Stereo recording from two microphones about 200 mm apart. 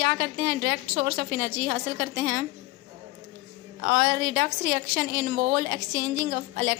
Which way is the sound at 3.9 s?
50° right (ahead or behind).